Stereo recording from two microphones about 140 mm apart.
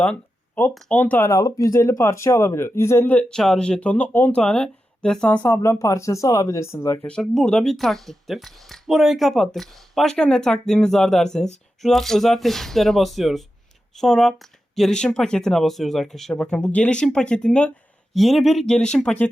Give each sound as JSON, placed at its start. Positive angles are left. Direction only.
{"t": 0.0, "sound": "a sound", "side_deg": 10}
{"t": 0.7, "sound": "speech", "side_deg": 10}
{"t": 1.3, "sound": "speech", "side_deg": 25}
{"t": 5.5, "sound": "speech", "side_deg": 20}
{"t": 7.1, "sound": "speech", "side_deg": 5}